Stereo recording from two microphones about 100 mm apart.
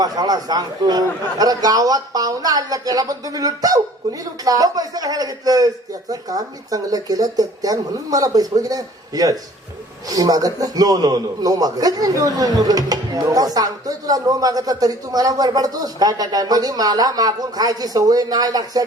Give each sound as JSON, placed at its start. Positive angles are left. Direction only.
{"t": 0.0, "sound": "a man's voice", "side_deg": -40}